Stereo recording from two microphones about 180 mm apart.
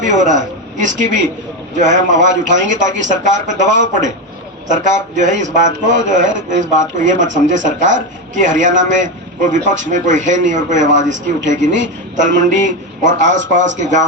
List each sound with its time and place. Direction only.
0.0 s a man's voice: 45° right (ahead or behind)
4.7 s a man's voice: 45° right (ahead or behind)